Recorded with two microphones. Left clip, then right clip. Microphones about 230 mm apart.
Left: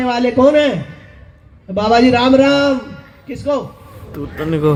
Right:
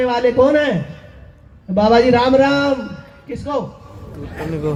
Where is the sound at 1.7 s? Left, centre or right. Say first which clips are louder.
Even; left.